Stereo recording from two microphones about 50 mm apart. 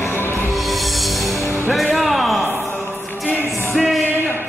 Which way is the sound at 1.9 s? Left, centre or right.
Centre.